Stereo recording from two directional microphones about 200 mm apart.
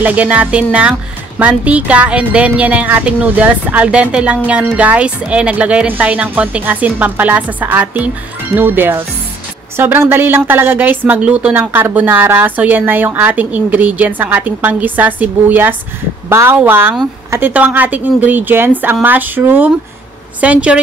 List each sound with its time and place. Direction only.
0.0 s a woman's voice: 5° right (ahead or behind)